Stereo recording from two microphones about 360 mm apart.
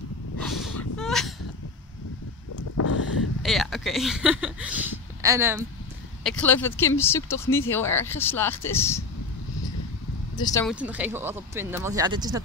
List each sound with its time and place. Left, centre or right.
0.4 s a sound: centre
2.8 s a sound: left
3.4 s speech: centre
6.2 s speech: centre
10.3 s speech: centre
10.7 s speech: centre